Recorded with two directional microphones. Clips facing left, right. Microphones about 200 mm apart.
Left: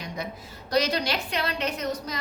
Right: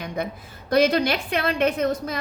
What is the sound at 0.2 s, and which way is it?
A woman's voice, 55° right (ahead or behind).